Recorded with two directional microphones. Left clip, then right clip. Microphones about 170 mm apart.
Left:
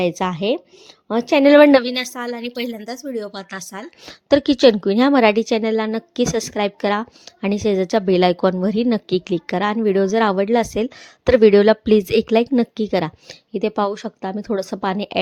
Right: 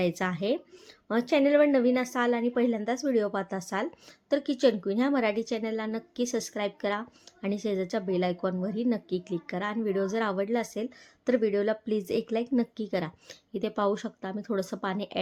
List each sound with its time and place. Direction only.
0.0 s a woman's voice: 35° left (ahead or behind)
1.5 s a woman's voice: 60° left (ahead or behind)
1.9 s speech: centre (ahead or behind)
4.0 s a woman's voice: 50° left (ahead or behind)